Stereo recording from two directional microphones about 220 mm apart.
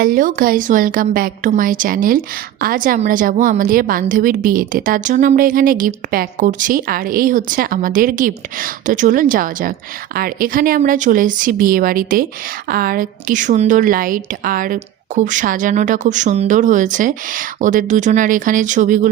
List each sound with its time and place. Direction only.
0.0 s a woman's voice: 40° right (ahead or behind)